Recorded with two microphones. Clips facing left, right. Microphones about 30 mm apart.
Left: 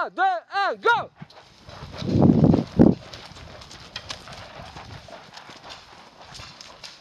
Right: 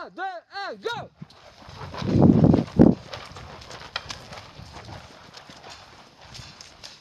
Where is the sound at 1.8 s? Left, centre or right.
Centre.